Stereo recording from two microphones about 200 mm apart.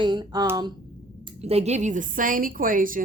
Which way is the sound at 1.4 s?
30° right (ahead or behind).